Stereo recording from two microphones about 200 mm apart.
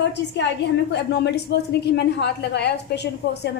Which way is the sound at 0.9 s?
55° left (ahead or behind).